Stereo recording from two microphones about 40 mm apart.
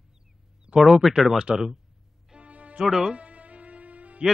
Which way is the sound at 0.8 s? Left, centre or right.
Centre.